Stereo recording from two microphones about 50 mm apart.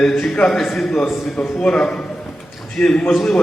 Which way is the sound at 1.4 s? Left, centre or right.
Centre.